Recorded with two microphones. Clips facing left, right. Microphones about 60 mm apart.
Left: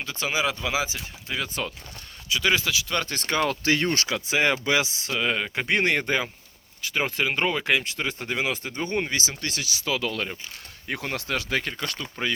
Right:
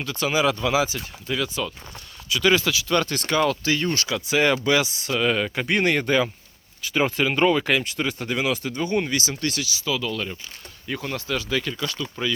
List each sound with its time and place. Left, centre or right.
0.0 s speech: left
3.1 s speech: left
3.6 s speech: left
4.1 s speech: left
8.4 s speech: left
9.0 s speech: left
9.6 s speech: left